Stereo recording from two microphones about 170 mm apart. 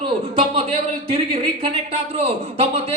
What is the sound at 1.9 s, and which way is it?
Speech, 35° right (ahead or behind).